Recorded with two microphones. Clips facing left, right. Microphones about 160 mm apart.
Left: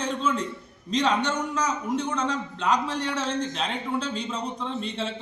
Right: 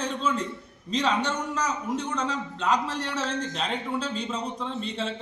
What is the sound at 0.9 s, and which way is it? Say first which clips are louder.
A man's voice: left 2 dB; 5° right (ahead or behind).